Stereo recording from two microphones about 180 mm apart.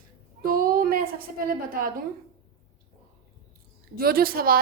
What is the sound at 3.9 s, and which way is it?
Speech, 55° right (ahead or behind).